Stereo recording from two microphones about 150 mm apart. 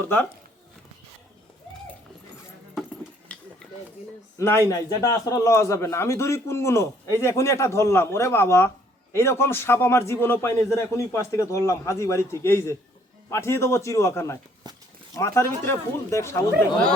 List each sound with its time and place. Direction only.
0.0 s a man's voice: 15° left (ahead or behind)
3.3 s a sound: 10° left (ahead or behind)
4.4 s a man's voice: 15° left (ahead or behind)